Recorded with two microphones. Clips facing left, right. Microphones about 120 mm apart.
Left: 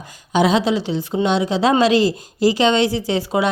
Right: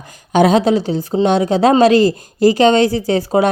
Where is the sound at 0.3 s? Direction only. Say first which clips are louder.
Right 5 dB; 50° right (ahead or behind).